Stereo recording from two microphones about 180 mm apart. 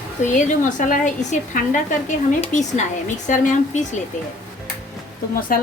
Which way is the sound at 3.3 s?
40° left (ahead or behind).